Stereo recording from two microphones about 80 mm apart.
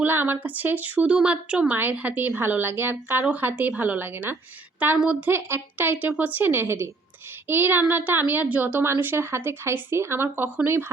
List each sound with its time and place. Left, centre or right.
0.0 s a woman's voice: right